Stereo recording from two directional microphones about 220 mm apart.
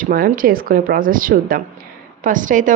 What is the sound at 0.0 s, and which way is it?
A woman's voice, 40° right (ahead or behind).